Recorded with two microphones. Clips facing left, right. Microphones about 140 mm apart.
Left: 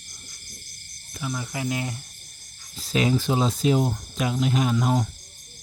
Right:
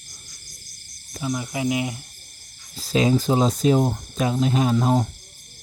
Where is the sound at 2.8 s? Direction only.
35° right (ahead or behind).